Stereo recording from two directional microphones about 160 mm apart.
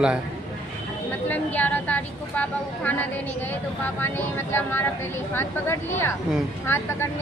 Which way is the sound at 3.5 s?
15° left (ahead or behind).